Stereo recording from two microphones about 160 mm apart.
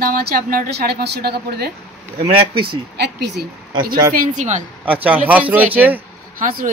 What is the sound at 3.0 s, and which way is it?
Speech, 90° right.